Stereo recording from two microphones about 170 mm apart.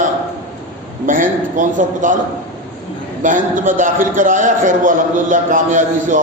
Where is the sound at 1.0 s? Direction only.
50° right (ahead or behind).